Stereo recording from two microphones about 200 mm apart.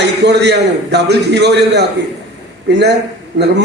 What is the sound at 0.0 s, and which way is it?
A man's voice, 55° right (ahead or behind).